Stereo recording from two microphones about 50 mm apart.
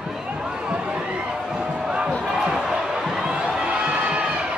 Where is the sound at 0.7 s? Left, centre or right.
Right.